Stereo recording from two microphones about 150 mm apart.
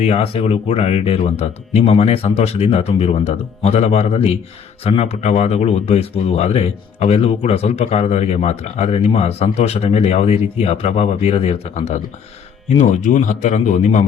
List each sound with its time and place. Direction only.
0.0 s a man's voice: 45° left (ahead or behind)